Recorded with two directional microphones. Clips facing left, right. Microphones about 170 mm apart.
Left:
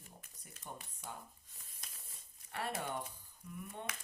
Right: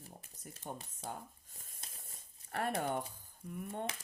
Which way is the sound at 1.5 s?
45° right (ahead or behind).